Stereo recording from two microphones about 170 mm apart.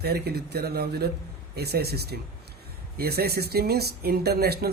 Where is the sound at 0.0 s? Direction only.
70° right (ahead or behind).